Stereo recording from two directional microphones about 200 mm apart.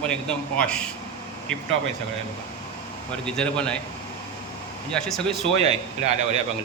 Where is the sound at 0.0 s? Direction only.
5° left (ahead or behind).